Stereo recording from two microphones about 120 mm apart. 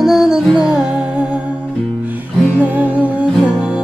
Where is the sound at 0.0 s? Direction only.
Centre (ahead or behind).